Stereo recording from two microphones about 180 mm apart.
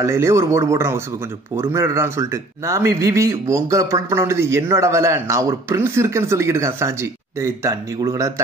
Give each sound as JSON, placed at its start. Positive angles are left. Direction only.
{"t": 0.0, "sound": "a man's voice", "side_deg": -15}